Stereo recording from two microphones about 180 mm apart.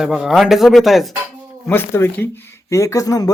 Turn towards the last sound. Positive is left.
turn(degrees=20)  # may be behind; listen again after turning